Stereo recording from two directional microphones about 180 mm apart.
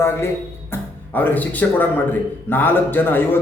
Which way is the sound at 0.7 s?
10° left (ahead or behind).